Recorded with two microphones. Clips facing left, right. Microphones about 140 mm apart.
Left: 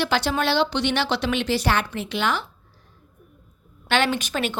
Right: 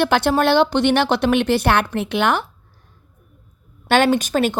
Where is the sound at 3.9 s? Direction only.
45° right (ahead or behind).